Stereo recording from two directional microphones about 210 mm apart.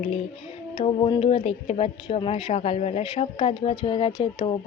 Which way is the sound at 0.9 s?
25° left (ahead or behind).